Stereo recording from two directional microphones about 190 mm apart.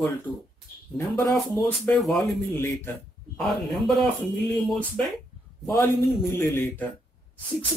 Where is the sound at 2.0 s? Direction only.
Centre (ahead or behind).